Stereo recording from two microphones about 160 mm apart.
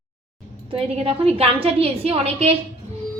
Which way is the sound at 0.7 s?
35° right (ahead or behind).